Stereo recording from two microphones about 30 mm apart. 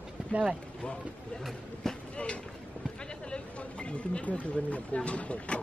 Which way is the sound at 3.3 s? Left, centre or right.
Left.